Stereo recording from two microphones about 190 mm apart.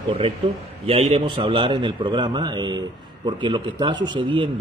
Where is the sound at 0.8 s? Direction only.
30° right (ahead or behind).